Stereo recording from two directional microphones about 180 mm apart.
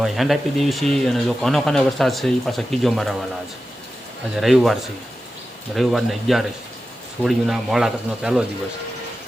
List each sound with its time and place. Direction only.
0.0 s speech: centre (ahead or behind)
4.4 s speech: centre (ahead or behind)